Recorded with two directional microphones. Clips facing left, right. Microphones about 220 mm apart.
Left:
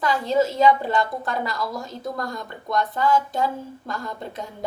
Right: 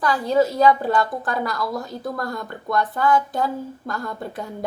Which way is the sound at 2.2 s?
20° left (ahead or behind).